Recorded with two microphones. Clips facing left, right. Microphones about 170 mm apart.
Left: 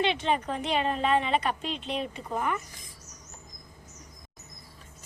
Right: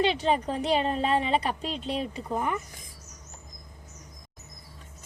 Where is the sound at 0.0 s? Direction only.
35° right (ahead or behind).